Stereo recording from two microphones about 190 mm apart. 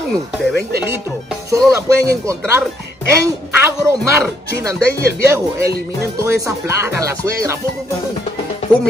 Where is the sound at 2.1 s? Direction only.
15° right (ahead or behind).